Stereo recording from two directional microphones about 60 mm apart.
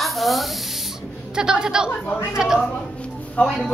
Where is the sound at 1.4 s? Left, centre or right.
Centre.